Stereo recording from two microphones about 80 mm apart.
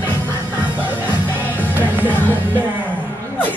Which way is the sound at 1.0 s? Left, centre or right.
Left.